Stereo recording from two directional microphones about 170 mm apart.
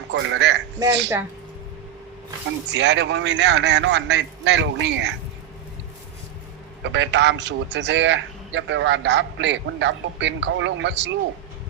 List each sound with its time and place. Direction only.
0.1 s a man's voice: 90° right
2.7 s a man's voice: 90° right
6.8 s a man's voice: 90° right